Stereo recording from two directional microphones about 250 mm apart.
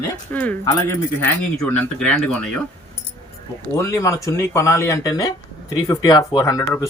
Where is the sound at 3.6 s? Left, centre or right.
Centre.